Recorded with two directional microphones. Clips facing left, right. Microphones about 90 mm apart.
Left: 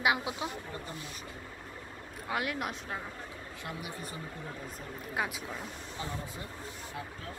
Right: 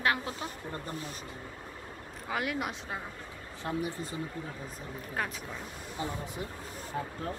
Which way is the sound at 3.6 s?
35° right (ahead or behind).